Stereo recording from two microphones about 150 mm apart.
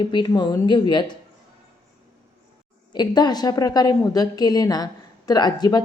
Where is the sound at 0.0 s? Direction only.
30° left (ahead or behind).